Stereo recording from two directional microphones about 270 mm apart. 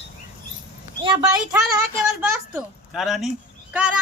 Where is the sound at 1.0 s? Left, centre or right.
Centre.